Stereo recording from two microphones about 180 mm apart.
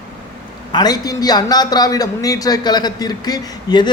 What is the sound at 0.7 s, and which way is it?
A man's voice, 20° left (ahead or behind).